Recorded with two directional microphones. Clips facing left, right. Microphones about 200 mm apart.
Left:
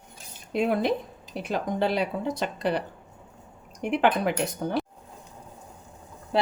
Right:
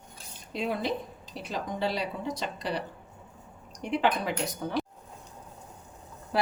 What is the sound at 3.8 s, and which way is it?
Speech, 55° left (ahead or behind).